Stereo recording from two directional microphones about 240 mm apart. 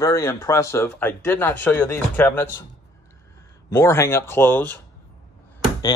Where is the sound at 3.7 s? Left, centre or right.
Centre.